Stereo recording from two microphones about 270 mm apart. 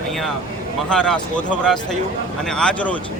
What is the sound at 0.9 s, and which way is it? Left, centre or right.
Speech, centre.